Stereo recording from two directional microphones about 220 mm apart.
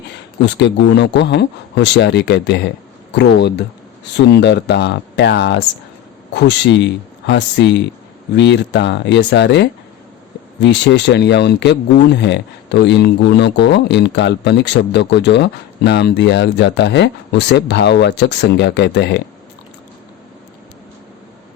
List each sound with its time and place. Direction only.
0.4 s speech: 50° left (ahead or behind)